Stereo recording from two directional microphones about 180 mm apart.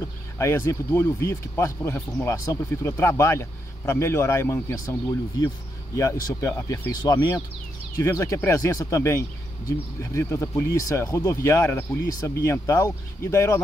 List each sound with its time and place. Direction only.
0.4 s speech: 15° left (ahead or behind)
5.9 s speech: 15° left (ahead or behind)